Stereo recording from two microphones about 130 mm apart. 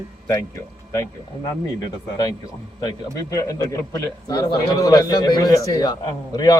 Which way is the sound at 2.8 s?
30° left (ahead or behind).